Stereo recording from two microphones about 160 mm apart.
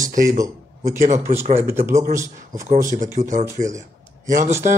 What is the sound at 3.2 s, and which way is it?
Speech, 45° right (ahead or behind).